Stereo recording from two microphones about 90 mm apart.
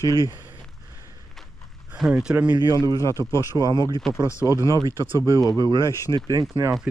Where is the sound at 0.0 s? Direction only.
40° left (ahead or behind).